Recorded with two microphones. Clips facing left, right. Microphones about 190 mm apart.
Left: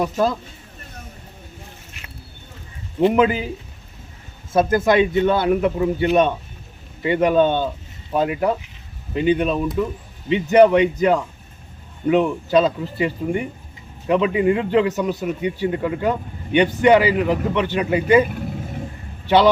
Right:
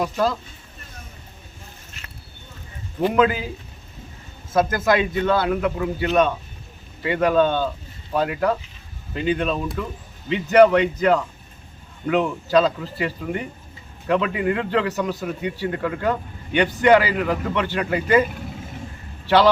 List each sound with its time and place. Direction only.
3.2 s speech: 20° left (ahead or behind)
4.7 s a man's voice: 25° left (ahead or behind)
18.3 s vehicle: 50° left (ahead or behind)